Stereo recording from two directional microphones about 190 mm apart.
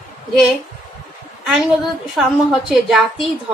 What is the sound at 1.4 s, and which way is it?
A woman's voice, centre (ahead or behind).